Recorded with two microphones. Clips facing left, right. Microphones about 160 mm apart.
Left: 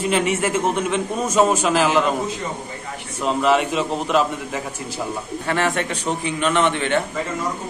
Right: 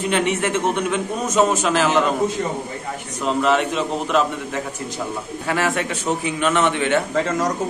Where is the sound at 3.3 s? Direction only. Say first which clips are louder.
Even; 5° left (ahead or behind).